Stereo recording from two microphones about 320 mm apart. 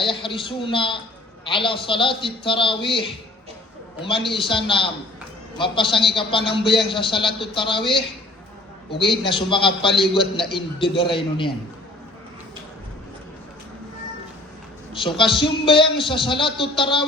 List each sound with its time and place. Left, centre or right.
0.0 s speech: centre
4.3 s speech: centre
8.9 s speech: centre
14.9 s speech: centre